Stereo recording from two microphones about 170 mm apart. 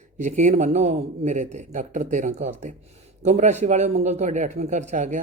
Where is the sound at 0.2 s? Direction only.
45° right (ahead or behind).